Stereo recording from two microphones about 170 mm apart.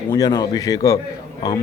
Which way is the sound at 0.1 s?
20° left (ahead or behind).